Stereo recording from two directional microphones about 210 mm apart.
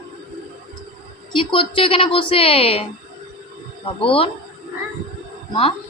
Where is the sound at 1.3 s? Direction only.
25° left (ahead or behind).